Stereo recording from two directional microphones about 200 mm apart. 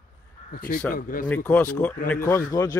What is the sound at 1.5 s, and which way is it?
Speech, 10° left (ahead or behind).